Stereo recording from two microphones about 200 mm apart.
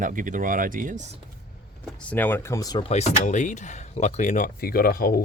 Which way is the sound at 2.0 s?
10° left (ahead or behind).